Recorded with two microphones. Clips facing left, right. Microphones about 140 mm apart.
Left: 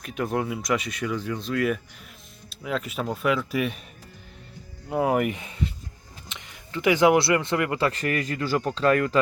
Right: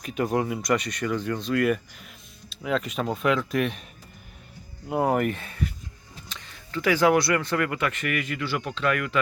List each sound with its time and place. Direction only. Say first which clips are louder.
0.0 s speech: right 2 dB; centre (ahead or behind)
4.9 s speech: even; centre (ahead or behind); by 9.1 s 35° left (ahead or behind)